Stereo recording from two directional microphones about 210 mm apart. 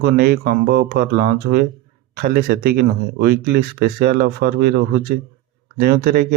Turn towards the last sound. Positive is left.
turn(degrees=-45)  # may be behind; listen again after turning